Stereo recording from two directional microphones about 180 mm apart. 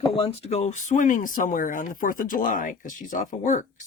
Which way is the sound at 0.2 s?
35° left (ahead or behind).